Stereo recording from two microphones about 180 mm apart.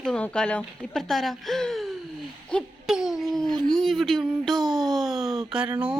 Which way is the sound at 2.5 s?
Centre (ahead or behind).